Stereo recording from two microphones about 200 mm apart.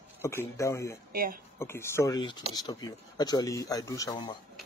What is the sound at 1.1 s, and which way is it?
Speech, 45° right (ahead or behind).